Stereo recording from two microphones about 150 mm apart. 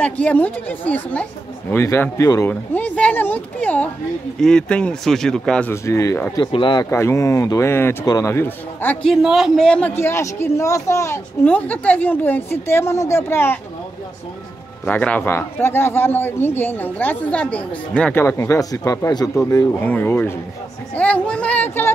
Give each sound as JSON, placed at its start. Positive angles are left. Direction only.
{"t": 0.0, "sound": "a man's voice", "side_deg": 10}
{"t": 6.3, "sound": "speech", "side_deg": 35}
{"t": 6.9, "sound": "a man's voice", "side_deg": 15}
{"t": 9.1, "sound": "a man's voice", "side_deg": 0}
{"t": 14.9, "sound": "a man's voice", "side_deg": 10}